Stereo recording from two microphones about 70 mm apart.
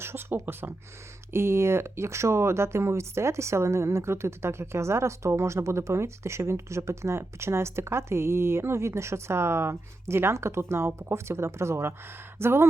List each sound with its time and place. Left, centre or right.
0.0 s speech: right